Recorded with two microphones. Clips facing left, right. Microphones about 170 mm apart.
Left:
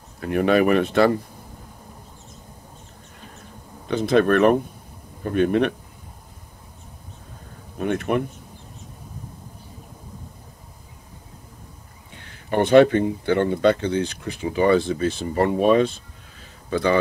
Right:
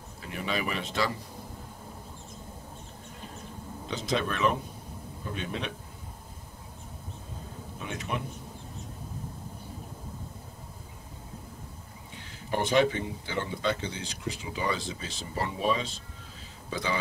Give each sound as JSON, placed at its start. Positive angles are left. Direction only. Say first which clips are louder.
{"t": 0.2, "sound": "speech", "louder": "left 15 dB", "side_deg": 60}
{"t": 3.8, "sound": "speech", "louder": "left 12 dB", "side_deg": 55}
{"t": 7.8, "sound": "speech", "louder": "left 13 dB", "side_deg": 55}
{"t": 12.2, "sound": "speech", "louder": "left 9 dB", "side_deg": 60}